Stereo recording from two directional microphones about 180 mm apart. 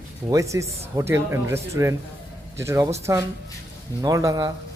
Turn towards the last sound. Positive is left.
turn(degrees=-20)  # may be behind; listen again after turning